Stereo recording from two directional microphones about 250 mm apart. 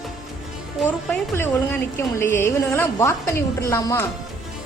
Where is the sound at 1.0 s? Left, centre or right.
Centre.